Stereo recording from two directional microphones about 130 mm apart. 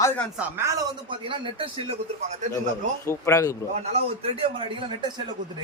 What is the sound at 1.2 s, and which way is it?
Speech, 40° right (ahead or behind).